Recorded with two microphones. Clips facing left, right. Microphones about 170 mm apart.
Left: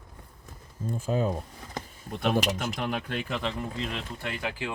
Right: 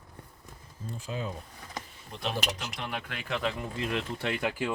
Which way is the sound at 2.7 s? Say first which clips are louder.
Left 6 dB; 40° left (ahead or behind).